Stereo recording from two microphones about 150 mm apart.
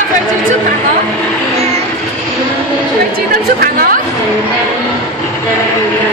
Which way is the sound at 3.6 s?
80° right.